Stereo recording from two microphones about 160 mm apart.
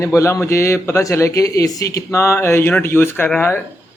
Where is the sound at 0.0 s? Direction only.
20° left (ahead or behind).